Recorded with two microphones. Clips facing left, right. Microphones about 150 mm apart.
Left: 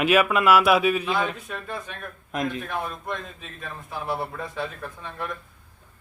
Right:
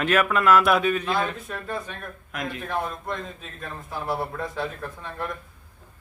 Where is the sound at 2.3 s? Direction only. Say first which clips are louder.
Left 5 dB; 20° left (ahead or behind).